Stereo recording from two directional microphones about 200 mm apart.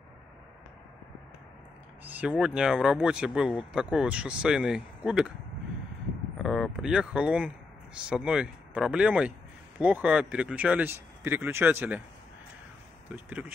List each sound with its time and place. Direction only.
2.0 s speech: 5° right (ahead or behind)
6.3 s a sound: centre (ahead or behind)
8.1 s speech: 5° right (ahead or behind)
13.1 s speech: 10° right (ahead or behind)